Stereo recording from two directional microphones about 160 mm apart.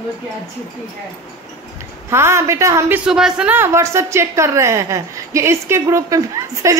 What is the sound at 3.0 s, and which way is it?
A woman's voice, 5° right (ahead or behind).